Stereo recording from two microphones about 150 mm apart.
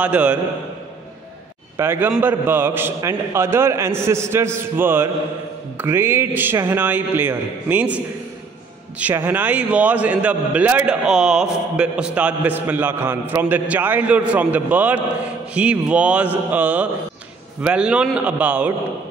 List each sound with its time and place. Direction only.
0.0 s a man's voice: 10° right (ahead or behind)
1.8 s a man's voice: 15° right (ahead or behind)